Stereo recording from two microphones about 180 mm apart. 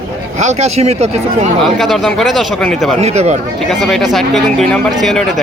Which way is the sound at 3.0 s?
40° right (ahead or behind).